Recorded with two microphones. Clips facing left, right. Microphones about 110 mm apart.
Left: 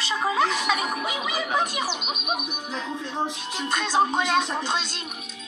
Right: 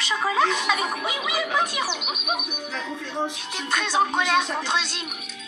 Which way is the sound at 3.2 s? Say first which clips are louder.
Left 1 dB; 35° left (ahead or behind).